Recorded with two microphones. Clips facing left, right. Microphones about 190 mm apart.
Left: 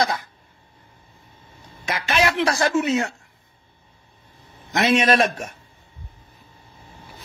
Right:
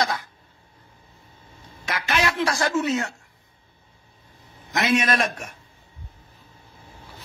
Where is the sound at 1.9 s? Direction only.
20° left (ahead or behind).